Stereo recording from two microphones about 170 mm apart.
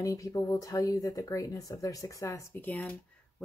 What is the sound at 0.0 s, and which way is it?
Speech, 20° left (ahead or behind).